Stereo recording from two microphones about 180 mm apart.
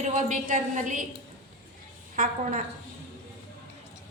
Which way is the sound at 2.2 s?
50° right (ahead or behind).